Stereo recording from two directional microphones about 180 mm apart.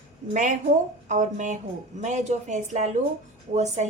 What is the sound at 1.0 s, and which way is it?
A woman's voice, 45° right (ahead or behind).